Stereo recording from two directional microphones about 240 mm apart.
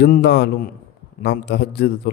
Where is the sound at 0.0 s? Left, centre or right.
Left.